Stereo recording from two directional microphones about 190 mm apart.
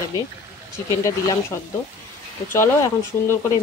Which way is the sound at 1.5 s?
15° left (ahead or behind).